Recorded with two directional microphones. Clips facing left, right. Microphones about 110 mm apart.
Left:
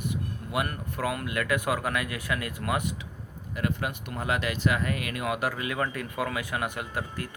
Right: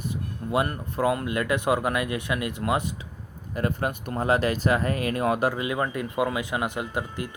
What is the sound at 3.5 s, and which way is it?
Speech, 40° right (ahead or behind).